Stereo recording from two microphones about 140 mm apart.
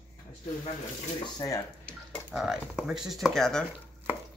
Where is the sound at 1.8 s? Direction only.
5° left (ahead or behind).